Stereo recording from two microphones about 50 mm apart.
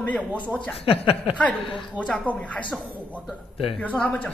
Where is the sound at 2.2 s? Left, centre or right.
Left.